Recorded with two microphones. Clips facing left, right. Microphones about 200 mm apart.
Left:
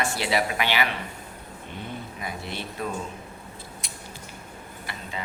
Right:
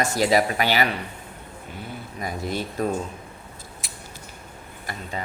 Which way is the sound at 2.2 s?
40° right (ahead or behind).